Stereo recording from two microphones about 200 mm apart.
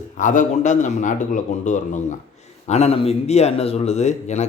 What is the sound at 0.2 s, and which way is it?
Speech, 40° left (ahead or behind).